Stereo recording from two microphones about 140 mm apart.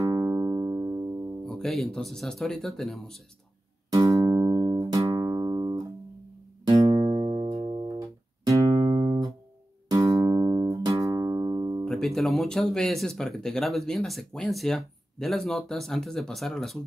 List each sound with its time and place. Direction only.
0.0 s music: 25° right (ahead or behind)
1.4 s speech: 5° left (ahead or behind)
3.9 s music: 25° right (ahead or behind)
11.8 s speech: 5° left (ahead or behind)